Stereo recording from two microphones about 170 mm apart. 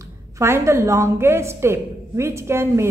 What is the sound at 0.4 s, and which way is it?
A woman's voice, 15° right (ahead or behind).